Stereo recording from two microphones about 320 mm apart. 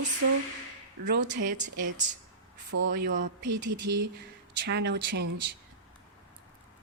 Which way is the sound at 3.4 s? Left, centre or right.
Right.